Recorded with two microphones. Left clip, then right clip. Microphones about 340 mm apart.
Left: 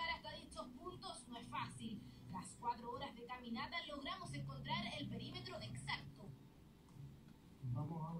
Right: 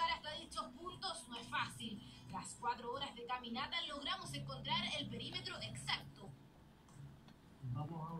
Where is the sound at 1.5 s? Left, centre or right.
Right.